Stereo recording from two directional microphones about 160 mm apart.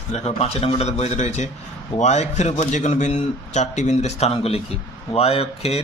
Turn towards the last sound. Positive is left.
turn(degrees=40)  # may be behind; listen again after turning